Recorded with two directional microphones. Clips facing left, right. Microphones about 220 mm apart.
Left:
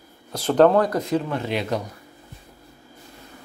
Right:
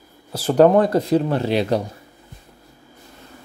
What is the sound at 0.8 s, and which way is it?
Speech, 30° right (ahead or behind).